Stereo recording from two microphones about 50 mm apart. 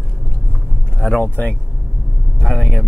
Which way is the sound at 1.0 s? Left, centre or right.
Left.